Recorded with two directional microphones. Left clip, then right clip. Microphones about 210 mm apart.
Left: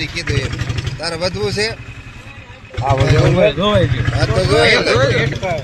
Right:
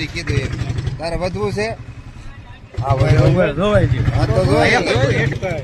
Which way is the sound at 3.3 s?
5° right (ahead or behind).